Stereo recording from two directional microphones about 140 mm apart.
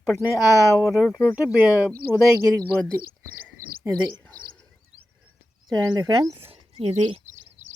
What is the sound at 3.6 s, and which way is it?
Bird, 90° right.